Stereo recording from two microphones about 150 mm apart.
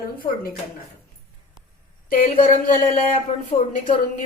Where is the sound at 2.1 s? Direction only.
65° left (ahead or behind).